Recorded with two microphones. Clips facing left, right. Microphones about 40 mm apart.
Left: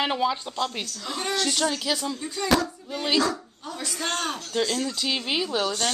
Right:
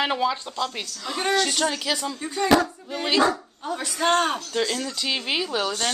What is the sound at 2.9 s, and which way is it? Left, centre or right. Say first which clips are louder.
Speech: left 1 dB; centre.